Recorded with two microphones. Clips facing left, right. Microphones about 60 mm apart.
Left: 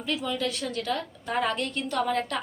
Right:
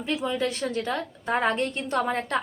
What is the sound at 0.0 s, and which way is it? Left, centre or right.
A woman's voice, right.